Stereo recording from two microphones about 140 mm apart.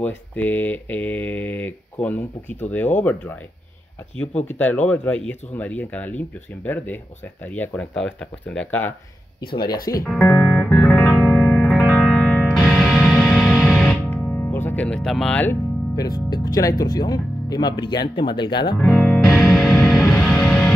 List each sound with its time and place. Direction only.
0.0 s speech: 10° left (ahead or behind)
4.4 s speech: 10° left (ahead or behind)
9.5 s speech: 35° left (ahead or behind)
10.0 s speech: 5° left (ahead or behind)
10.8 s music: 10° left (ahead or behind)
14.1 s music: 15° left (ahead or behind)
16.0 s speech: 25° left (ahead or behind)
18.8 s speech: centre (ahead or behind)
19.2 s music: 20° left (ahead or behind)
19.5 s music: centre (ahead or behind)